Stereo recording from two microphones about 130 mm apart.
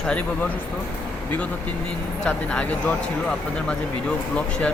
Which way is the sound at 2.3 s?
10° left (ahead or behind).